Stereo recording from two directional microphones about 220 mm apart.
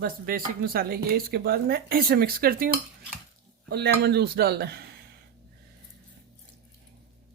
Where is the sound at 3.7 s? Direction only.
45° right (ahead or behind).